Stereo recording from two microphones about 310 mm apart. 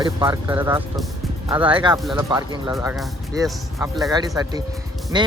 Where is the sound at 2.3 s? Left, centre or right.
Centre.